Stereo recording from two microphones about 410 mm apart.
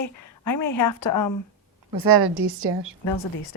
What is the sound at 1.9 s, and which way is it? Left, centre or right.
Speech, right.